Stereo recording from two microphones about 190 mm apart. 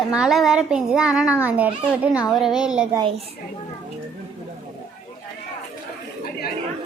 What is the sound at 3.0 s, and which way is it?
Speech, 30° right (ahead or behind).